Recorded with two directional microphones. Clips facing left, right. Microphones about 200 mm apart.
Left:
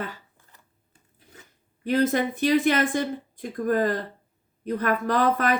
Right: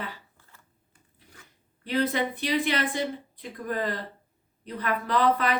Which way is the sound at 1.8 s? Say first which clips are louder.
Left 4 dB; 45° left (ahead or behind).